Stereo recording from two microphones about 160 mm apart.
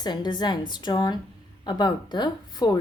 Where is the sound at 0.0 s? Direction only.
25° left (ahead or behind).